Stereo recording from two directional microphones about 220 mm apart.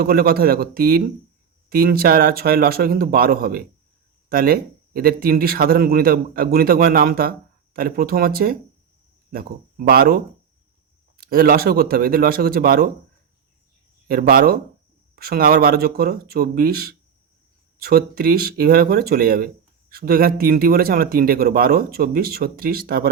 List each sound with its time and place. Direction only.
0.0 s speech: 45° right (ahead or behind)
11.2 s speech: 45° right (ahead or behind)
14.1 s speech: 40° right (ahead or behind)